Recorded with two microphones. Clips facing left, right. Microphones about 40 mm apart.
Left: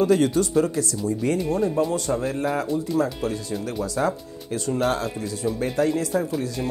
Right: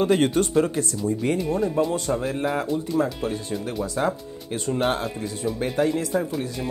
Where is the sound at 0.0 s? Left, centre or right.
Right.